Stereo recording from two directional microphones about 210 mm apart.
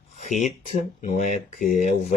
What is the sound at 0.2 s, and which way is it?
Speech, 35° left (ahead or behind).